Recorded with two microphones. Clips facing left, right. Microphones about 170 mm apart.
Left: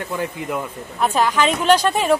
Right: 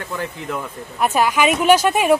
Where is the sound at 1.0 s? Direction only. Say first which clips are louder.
Right 1 dB; 10° right (ahead or behind).